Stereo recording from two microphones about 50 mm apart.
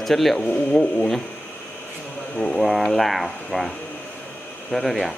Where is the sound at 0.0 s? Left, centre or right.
Centre.